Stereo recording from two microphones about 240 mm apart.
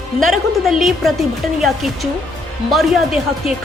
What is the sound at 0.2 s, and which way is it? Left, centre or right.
A woman's voice, centre.